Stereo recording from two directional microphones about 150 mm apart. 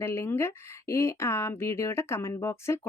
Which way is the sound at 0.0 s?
15° left (ahead or behind).